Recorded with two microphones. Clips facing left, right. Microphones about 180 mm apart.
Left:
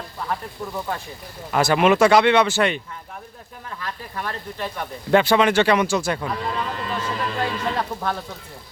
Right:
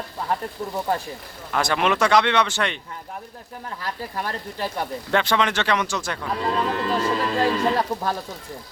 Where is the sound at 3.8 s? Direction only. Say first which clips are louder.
Right 1 dB; 35° right (ahead or behind).